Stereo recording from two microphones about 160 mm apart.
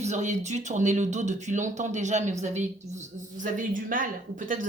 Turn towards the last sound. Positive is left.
turn(degrees=-55)  # may be behind; listen again after turning